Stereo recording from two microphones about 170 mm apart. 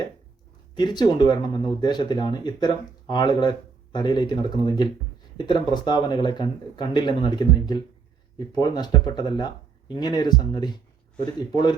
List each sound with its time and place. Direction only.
0.8 s speech: 25° left (ahead or behind)